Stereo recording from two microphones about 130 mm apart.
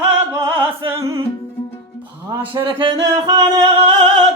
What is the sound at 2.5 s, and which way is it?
Music, 40° right (ahead or behind).